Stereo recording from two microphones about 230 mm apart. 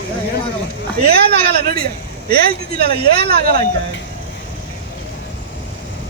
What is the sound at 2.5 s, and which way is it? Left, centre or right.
Speech, right.